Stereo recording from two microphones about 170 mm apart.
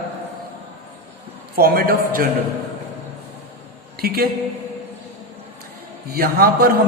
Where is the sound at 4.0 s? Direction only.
60° right (ahead or behind).